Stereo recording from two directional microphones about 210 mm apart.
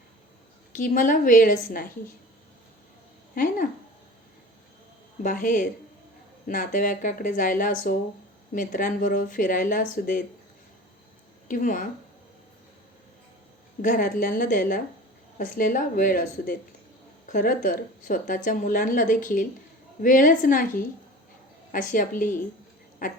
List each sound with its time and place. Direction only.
0.7 s a woman's voice: 40° left (ahead or behind)
3.3 s a woman's voice: 40° left (ahead or behind)
5.2 s a woman's voice: 40° left (ahead or behind)
11.4 s speech: 40° left (ahead or behind)
13.8 s a woman's voice: 40° left (ahead or behind)